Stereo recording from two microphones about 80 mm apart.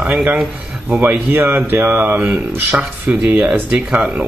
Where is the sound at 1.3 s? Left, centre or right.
Right.